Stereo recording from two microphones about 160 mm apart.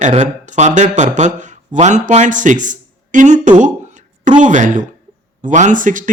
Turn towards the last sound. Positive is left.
turn(degrees=-55)  # may be behind; listen again after turning